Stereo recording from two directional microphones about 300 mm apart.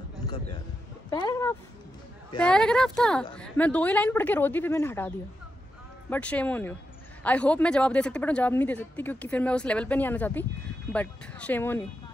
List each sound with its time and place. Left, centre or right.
1.1 s speech: centre
2.3 s speech: centre